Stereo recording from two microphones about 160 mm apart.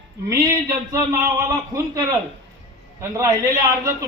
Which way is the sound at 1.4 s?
20° right (ahead or behind).